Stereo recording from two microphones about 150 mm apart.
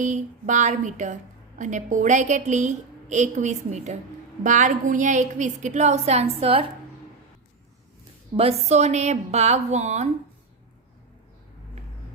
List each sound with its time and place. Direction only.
0.0 s a woman's voice: 55° right (ahead or behind)
8.4 s a woman's voice: 45° right (ahead or behind)